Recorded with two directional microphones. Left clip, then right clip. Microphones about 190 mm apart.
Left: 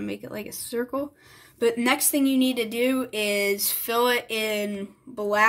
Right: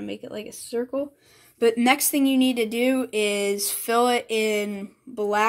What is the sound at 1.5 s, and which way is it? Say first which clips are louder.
Speech: right 3 dB; 25° right (ahead or behind).